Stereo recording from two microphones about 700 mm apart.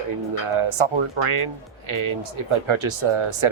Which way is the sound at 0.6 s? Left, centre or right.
Right.